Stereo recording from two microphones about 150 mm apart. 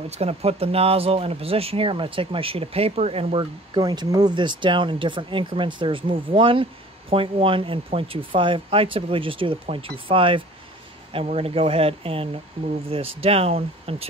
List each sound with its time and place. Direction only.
0.1 s speech: 45° right (ahead or behind)
3.7 s speech: 30° right (ahead or behind)